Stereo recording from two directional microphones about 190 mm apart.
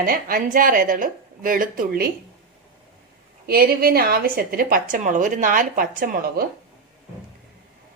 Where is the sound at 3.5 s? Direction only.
50° right (ahead or behind).